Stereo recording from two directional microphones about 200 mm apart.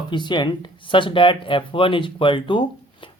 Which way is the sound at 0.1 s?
25° left (ahead or behind).